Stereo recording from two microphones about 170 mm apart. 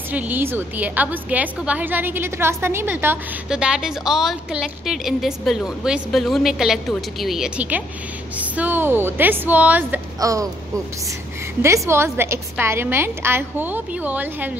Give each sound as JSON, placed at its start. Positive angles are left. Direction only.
{"t": 0.1, "sound": "a woman's voice", "side_deg": -10}
{"t": 11.6, "sound": "a woman's voice", "side_deg": -15}